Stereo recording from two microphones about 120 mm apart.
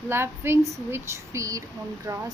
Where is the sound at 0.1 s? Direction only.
20° right (ahead or behind).